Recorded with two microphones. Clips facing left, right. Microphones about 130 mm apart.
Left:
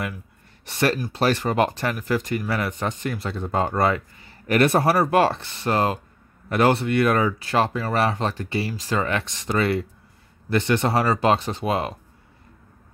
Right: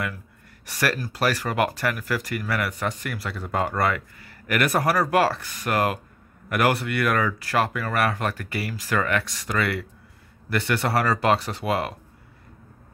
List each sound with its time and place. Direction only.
0.7 s speech: 25° left (ahead or behind)